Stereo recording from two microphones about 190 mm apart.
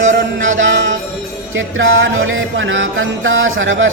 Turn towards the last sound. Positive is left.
turn(degrees=-90)